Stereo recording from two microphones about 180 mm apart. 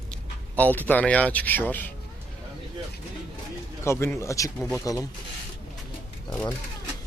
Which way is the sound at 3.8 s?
15° left (ahead or behind).